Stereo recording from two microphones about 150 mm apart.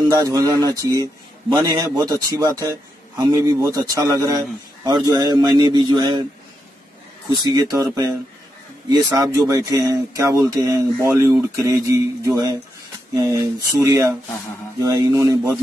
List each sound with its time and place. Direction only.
0.1 s speech: 25° right (ahead or behind)
7.2 s speech: 25° right (ahead or behind)